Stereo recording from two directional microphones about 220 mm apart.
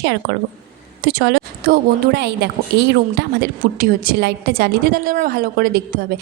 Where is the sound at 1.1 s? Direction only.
50° right (ahead or behind).